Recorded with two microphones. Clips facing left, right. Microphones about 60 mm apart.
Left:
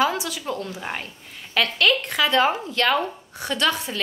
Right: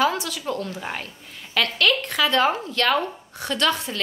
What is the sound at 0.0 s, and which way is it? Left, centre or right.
A woman's voice, centre.